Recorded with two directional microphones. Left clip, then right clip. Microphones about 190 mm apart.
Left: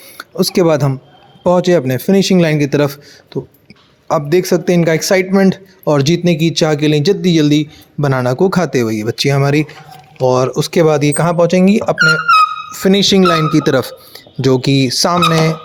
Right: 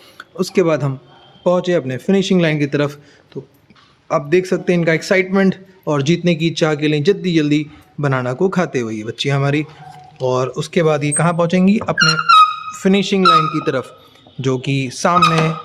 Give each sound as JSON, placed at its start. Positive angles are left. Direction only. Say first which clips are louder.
{"t": 0.2, "sound": "a man's voice", "louder": "left 3 dB", "side_deg": 25}